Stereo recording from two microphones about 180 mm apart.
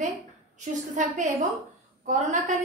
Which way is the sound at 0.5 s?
45° right (ahead or behind).